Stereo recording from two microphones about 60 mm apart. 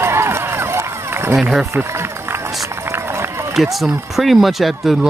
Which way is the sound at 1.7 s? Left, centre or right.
Right.